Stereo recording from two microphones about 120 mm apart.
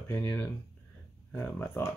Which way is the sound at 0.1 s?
15° left (ahead or behind).